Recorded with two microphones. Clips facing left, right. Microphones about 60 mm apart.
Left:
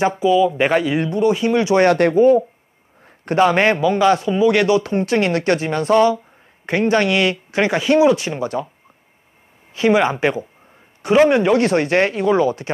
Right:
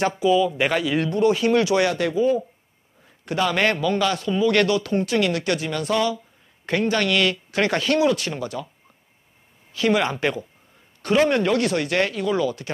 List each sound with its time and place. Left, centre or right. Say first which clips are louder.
0.5 s speech: left 5 dB; left
1.9 s a man's voice: left 8 dB; left
6.6 s speech: left 5 dB; left
9.8 s speech: left 5 dB; left
11.6 s a man's voice: left 6 dB; left